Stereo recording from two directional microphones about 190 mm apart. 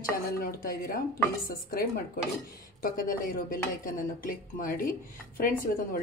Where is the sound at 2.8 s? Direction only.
50° left (ahead or behind).